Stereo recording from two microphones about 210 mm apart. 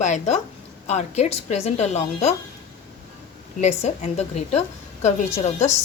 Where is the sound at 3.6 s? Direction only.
30° left (ahead or behind).